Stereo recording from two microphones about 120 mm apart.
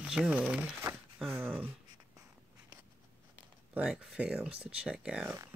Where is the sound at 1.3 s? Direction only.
20° right (ahead or behind).